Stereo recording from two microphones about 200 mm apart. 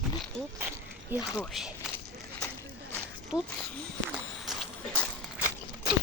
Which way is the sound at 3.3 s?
20° left (ahead or behind).